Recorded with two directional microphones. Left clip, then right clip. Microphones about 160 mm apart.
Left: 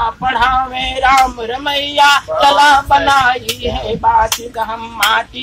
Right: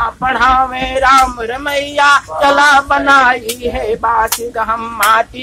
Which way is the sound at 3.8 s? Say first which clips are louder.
Left 1 dB; 30° right (ahead or behind).